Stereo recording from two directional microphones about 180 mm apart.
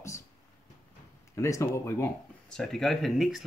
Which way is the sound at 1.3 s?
15° left (ahead or behind).